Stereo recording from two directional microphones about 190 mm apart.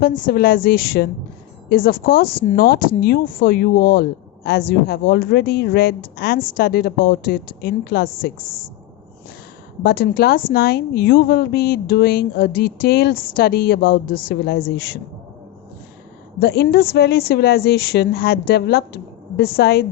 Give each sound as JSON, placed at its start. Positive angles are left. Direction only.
{"t": 0.0, "sound": "a woman's voice", "side_deg": 45}
{"t": 9.8, "sound": "a woman's voice", "side_deg": 50}
{"t": 16.4, "sound": "a woman's voice", "side_deg": 55}